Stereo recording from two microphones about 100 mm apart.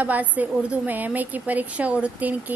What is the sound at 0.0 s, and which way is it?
A woman's voice, 15° right (ahead or behind).